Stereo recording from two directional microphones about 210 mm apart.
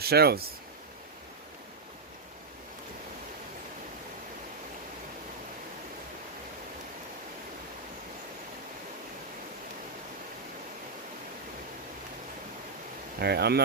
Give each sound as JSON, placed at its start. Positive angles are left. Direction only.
{"t": 0.0, "sound": "speech", "side_deg": -50}
{"t": 13.1, "sound": "speech", "side_deg": -50}